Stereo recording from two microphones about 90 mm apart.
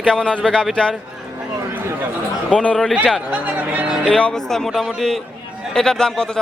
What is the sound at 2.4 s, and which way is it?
Speech, 10° left (ahead or behind).